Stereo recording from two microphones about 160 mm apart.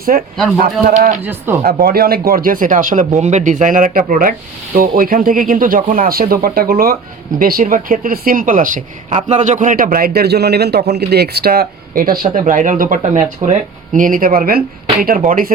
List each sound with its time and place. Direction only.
0.1 s speech: 55° right (ahead or behind)
1.2 s speech: 15° right (ahead or behind)
1.6 s speech: 70° right (ahead or behind)